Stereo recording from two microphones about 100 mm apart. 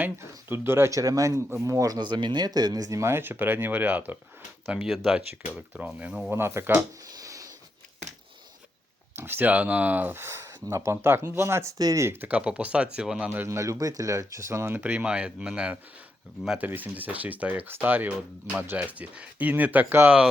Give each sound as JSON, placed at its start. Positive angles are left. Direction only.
{"t": 0.0, "sound": "speech", "side_deg": -20}
{"t": 2.0, "sound": "speech", "side_deg": -50}
{"t": 4.7, "sound": "speech", "side_deg": -5}
{"t": 6.3, "sound": "speech", "side_deg": -25}
{"t": 7.1, "sound": "a sound", "side_deg": -35}
{"t": 9.1, "sound": "speech", "side_deg": -20}
{"t": 11.8, "sound": "speech", "side_deg": -40}
{"t": 12.0, "sound": "speech", "side_deg": -15}
{"t": 14.8, "sound": "speech", "side_deg": -15}